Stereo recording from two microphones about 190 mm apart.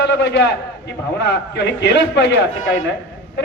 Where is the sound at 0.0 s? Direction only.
65° left (ahead or behind).